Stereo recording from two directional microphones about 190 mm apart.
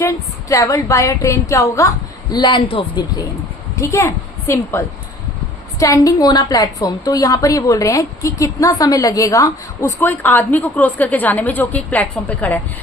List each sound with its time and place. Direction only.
0.0 s a woman's voice: 15° left (ahead or behind)
5.8 s a woman's voice: 20° left (ahead or behind)